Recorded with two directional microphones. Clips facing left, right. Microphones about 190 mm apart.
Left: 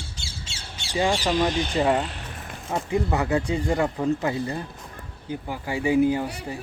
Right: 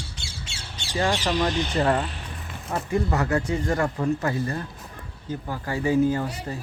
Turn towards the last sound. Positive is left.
turn(degrees=15)  # may be behind; listen again after turning